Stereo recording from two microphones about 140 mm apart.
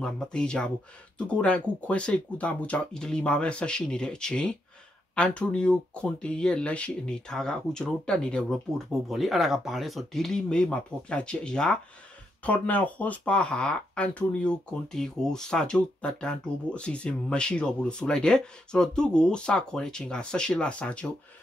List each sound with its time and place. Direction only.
0.0 s speech: 5° left (ahead or behind)